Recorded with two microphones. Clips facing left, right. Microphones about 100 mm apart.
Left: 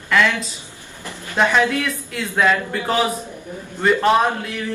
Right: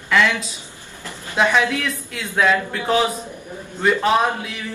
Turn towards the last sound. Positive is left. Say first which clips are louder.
# left 2 dB
turn(degrees=0)  # may be behind; listen again after turning